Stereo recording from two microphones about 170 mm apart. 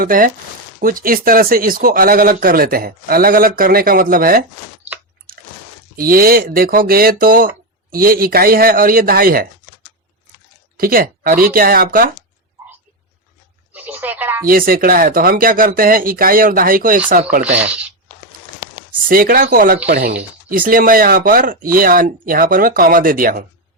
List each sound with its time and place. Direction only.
0.0 s speech: 55° right (ahead or behind)
6.0 s speech: 60° right (ahead or behind)
10.8 s speech: 60° right (ahead or behind)
13.7 s a sound: 10° right (ahead or behind)
14.4 s speech: 60° right (ahead or behind)
19.0 s speech: 55° right (ahead or behind)
19.9 s speech: 70° right (ahead or behind)
20.5 s speech: 55° right (ahead or behind)